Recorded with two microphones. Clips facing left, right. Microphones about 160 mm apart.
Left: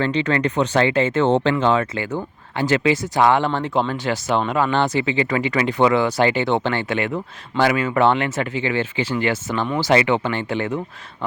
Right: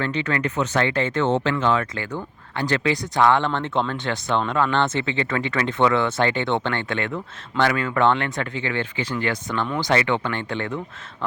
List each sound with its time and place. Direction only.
0.0 s speech: 25° left (ahead or behind); by 10.7 s 10° left (ahead or behind)